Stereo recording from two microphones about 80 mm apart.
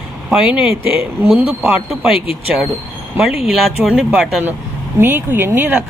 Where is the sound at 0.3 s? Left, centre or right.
Centre.